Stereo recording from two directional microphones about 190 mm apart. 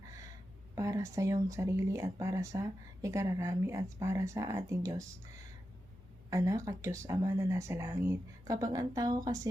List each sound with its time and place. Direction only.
0.8 s speech: 15° right (ahead or behind)
6.3 s speech: 15° right (ahead or behind)